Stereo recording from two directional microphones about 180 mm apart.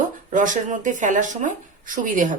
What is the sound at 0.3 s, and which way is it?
Speech, 45° right (ahead or behind).